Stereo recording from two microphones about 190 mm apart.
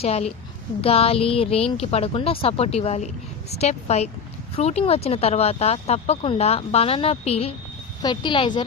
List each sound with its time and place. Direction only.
0.0 s a woman's voice: 35° left (ahead or behind)